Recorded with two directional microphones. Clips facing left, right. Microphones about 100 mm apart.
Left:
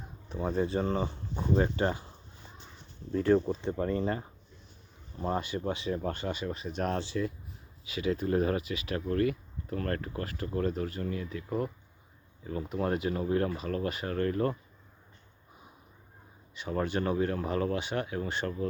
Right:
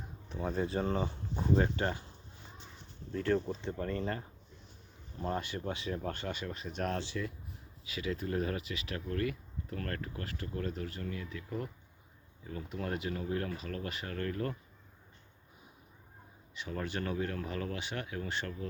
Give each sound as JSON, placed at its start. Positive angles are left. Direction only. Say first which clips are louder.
{"t": 0.3, "sound": "speech", "louder": "left 4 dB", "side_deg": 10}
{"t": 1.6, "sound": "speech", "louder": "left 4 dB", "side_deg": 10}
{"t": 3.1, "sound": "speech", "louder": "left 6 dB", "side_deg": 20}
{"t": 5.2, "sound": "speech", "louder": "left 4 dB", "side_deg": 5}
{"t": 8.1, "sound": "speech", "louder": "left 7 dB", "side_deg": 40}
{"t": 12.7, "sound": "speech", "louder": "left 7 dB", "side_deg": 40}
{"t": 16.6, "sound": "speech", "louder": "left 7 dB", "side_deg": 35}